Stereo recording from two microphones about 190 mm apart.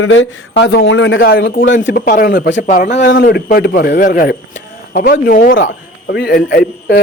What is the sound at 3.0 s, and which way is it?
Speech, 70° left (ahead or behind).